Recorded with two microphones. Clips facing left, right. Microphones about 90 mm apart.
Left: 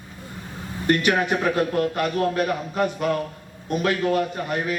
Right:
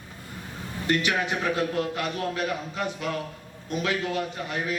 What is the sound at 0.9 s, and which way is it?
A man's voice, 50° left (ahead or behind).